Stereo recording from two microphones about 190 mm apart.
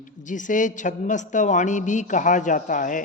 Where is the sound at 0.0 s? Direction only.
40° left (ahead or behind).